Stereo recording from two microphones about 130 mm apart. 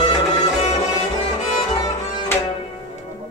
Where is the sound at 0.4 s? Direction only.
55° left (ahead or behind).